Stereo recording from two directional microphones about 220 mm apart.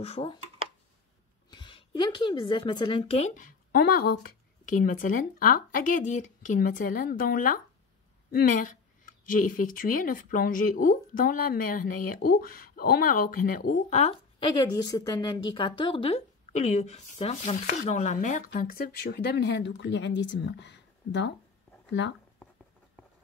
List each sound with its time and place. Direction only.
0.0 s a woman's voice: 25° left (ahead or behind)
1.5 s a woman's voice: 20° left (ahead or behind)
14.5 s a woman's voice: 20° left (ahead or behind); by 22.1 s 55° left (ahead or behind)